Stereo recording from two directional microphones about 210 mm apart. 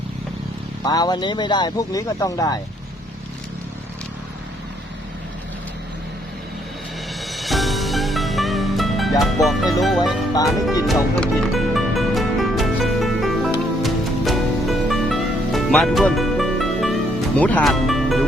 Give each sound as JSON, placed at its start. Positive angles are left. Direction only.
{"t": 0.9, "sound": "speech", "side_deg": 20}
{"t": 7.3, "sound": "music", "side_deg": 0}
{"t": 9.8, "sound": "speech", "side_deg": 0}
{"t": 11.2, "sound": "music", "side_deg": 0}